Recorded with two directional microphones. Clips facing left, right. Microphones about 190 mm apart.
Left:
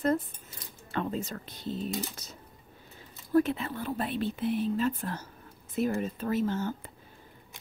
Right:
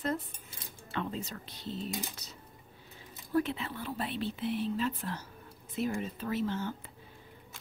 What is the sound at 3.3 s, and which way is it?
Speech, 45° left (ahead or behind).